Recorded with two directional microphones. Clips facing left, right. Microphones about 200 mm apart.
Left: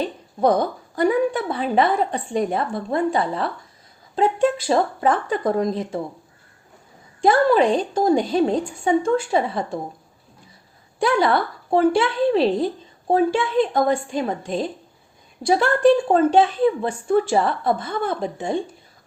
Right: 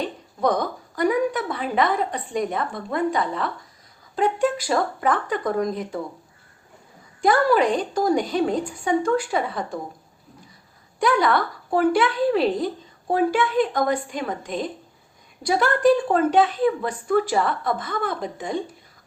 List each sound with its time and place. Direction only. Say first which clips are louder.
0.0 s a woman's voice: left 3 dB; 30° left (ahead or behind)
7.2 s speech: left 2 dB; 25° left (ahead or behind)
11.0 s speech: left 1 dB; 30° left (ahead or behind)